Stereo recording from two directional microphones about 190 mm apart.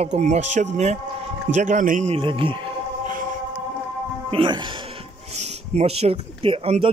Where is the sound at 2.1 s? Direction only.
25° right (ahead or behind).